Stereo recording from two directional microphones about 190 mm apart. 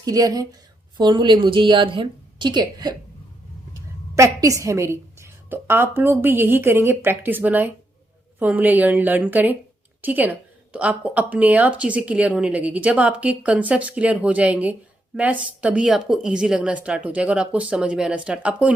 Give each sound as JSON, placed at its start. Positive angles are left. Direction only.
{"t": 0.0, "sound": "a woman's voice", "side_deg": -20}